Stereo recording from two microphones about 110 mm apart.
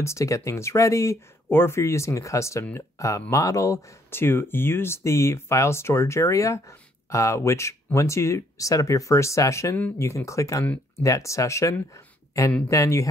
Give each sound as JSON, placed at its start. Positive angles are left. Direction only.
{"t": 0.0, "sound": "speech", "side_deg": 25}